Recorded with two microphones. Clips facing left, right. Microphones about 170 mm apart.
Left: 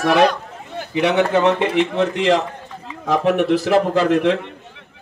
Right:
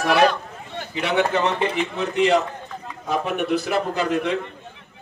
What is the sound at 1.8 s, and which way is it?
A man's voice, 90° left.